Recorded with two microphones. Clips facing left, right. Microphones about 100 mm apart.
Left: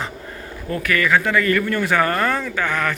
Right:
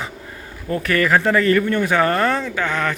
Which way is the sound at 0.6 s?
30° right (ahead or behind).